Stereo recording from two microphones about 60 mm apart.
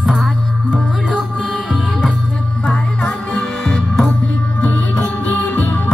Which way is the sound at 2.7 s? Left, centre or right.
Left.